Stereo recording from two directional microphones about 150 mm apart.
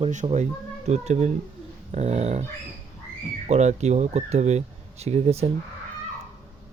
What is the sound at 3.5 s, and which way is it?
Speech, 50° right (ahead or behind).